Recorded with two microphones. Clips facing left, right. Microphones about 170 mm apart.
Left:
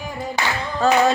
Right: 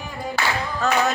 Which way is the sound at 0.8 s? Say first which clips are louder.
Left 5 dB; 30° left (ahead or behind).